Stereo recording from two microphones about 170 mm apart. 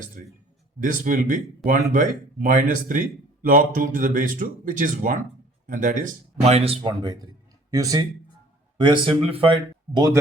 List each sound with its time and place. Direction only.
0.8 s speech: 50° right (ahead or behind); by 6.9 s 35° right (ahead or behind)
7.0 s speech: 25° right (ahead or behind)